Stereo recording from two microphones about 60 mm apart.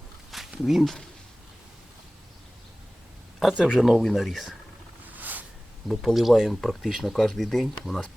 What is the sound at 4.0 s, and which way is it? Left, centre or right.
Speech, centre.